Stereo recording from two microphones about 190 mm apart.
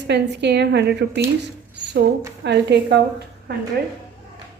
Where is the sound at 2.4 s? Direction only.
60° right (ahead or behind).